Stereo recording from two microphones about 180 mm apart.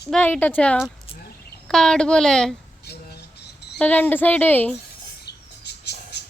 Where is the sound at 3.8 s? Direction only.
10° left (ahead or behind).